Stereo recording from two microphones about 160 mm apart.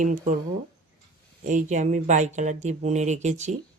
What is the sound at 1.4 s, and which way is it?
Speech, 50° right (ahead or behind).